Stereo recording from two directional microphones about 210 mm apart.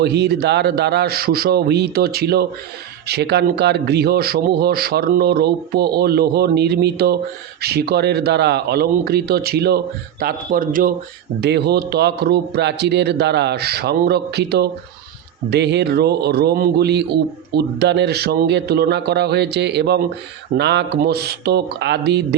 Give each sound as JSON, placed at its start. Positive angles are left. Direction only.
{"t": 0.0, "sound": "a man's voice", "side_deg": -50}
{"t": 11.3, "sound": "a man's voice", "side_deg": -50}